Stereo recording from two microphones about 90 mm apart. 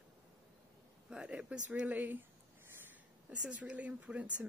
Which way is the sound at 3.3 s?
10° right (ahead or behind).